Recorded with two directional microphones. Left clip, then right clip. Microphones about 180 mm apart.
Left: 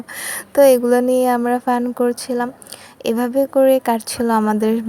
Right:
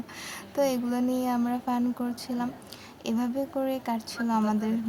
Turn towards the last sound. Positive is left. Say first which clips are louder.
# left 11 dB
turn(degrees=45)  # may be behind; listen again after turning